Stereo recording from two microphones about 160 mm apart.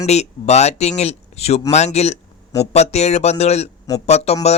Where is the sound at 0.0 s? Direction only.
45° left (ahead or behind).